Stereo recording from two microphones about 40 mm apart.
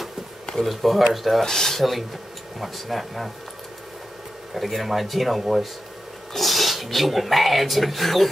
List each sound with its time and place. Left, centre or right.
0.6 s speech: centre
1.4 s speech: centre
4.6 s speech: centre